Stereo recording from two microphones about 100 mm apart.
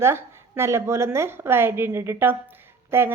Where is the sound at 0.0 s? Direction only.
25° right (ahead or behind).